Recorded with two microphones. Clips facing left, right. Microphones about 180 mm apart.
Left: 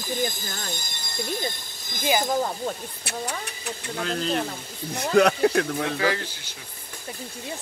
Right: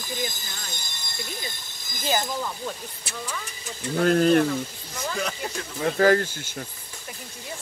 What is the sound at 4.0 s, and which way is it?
Speech, 50° right (ahead or behind).